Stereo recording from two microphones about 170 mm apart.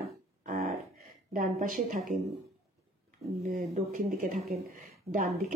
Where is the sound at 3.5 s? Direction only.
50° right (ahead or behind).